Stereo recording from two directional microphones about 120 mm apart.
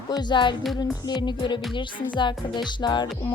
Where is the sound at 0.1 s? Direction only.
35° left (ahead or behind).